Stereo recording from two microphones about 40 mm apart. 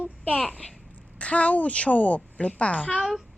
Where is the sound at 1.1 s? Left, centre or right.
Left.